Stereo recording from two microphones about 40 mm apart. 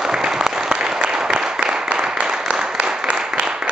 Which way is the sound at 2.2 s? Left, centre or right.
Centre.